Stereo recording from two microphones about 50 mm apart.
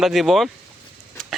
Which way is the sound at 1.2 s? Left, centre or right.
Centre.